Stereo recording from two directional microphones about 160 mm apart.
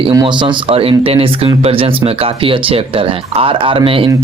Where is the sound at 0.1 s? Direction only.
25° right (ahead or behind).